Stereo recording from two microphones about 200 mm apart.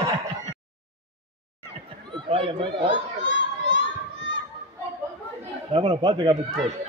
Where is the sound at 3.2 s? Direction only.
65° left (ahead or behind).